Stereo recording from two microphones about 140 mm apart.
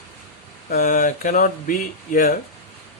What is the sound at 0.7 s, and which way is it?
Speech, 75° left (ahead or behind).